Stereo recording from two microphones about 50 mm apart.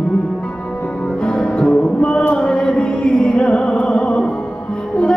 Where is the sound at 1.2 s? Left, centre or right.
Centre.